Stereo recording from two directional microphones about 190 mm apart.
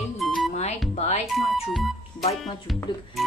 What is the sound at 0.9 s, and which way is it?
Music, 35° left (ahead or behind).